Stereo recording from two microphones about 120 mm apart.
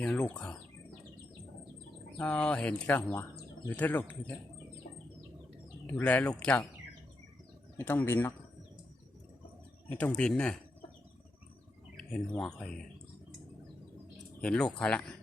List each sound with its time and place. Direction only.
0.0 s speech: 10° left (ahead or behind)
2.1 s speech: 10° left (ahead or behind)
5.8 s speech: 15° left (ahead or behind)
7.8 s speech: 15° left (ahead or behind)
10.2 s speech: 5° left (ahead or behind)
11.9 s speech: 5° left (ahead or behind)
14.4 s speech: 5° left (ahead or behind)